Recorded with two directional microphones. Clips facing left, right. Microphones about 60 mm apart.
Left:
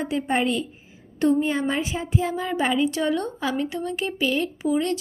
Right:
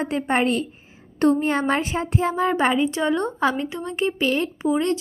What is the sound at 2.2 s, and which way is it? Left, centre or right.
Speech, right.